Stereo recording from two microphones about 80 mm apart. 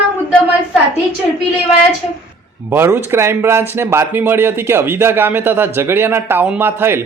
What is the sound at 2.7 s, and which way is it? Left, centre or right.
Speech, right.